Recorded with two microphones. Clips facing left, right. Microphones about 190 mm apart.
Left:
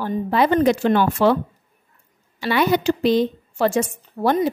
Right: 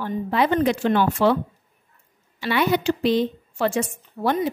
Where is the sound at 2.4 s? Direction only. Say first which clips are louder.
Left 2 dB; 40° left (ahead or behind).